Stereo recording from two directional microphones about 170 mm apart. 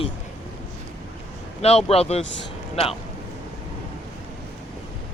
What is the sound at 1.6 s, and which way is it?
Speech, 35° left (ahead or behind).